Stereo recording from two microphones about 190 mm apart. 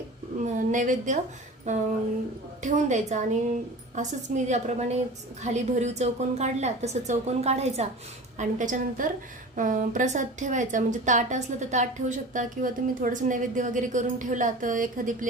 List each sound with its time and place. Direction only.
0.4 s a woman's voice: 40° right (ahead or behind)
4.4 s a woman's voice: 35° right (ahead or behind)